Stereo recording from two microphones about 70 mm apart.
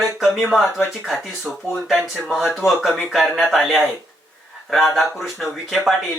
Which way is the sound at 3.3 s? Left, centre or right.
Centre.